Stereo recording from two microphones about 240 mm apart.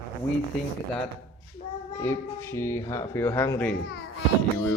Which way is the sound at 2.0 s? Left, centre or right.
Centre.